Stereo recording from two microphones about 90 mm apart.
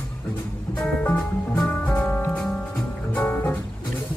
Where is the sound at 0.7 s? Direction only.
15° left (ahead or behind).